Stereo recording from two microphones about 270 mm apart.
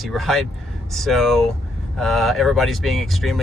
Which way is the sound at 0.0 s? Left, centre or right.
Centre.